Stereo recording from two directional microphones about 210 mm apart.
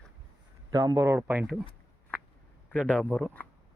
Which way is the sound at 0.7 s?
20° right (ahead or behind).